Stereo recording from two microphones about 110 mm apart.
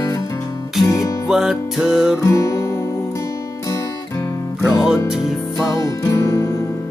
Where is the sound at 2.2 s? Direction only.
30° left (ahead or behind).